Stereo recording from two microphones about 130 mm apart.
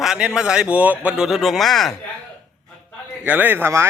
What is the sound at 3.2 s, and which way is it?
Speech, 15° right (ahead or behind).